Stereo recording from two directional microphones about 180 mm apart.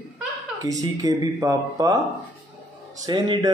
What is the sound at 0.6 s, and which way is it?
Speech, 20° right (ahead or behind).